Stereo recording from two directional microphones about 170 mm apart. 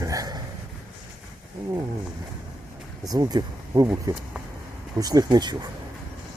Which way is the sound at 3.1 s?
25° right (ahead or behind).